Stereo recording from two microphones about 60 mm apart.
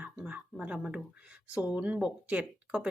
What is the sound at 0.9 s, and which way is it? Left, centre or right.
Speech, centre.